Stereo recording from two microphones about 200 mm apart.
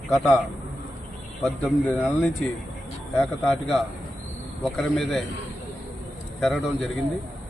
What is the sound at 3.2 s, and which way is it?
A man's voice, centre (ahead or behind).